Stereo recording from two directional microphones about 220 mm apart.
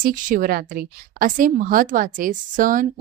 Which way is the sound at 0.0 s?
40° right (ahead or behind).